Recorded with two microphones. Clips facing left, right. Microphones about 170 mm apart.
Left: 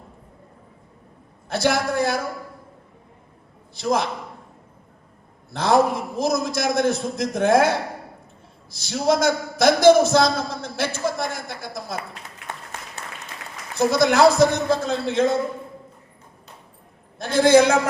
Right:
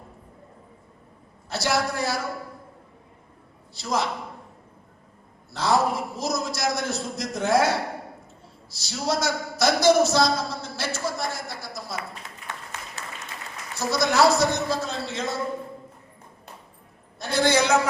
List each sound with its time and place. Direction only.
1.5 s a man's voice: 55° left (ahead or behind)
3.8 s a man's voice: 55° left (ahead or behind)
5.5 s a man's voice: 55° left (ahead or behind)
8.7 s a man's voice: 55° left (ahead or behind)
13.7 s a man's voice: 55° left (ahead or behind)
17.2 s a man's voice: 50° left (ahead or behind)